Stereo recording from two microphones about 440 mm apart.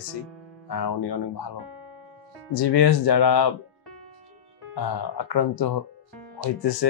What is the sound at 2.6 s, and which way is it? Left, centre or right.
Speech, left.